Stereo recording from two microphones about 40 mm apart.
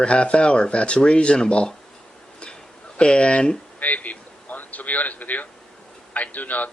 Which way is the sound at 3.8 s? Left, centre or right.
Left.